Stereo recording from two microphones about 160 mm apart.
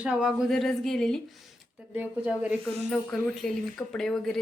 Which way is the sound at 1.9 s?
10° right (ahead or behind).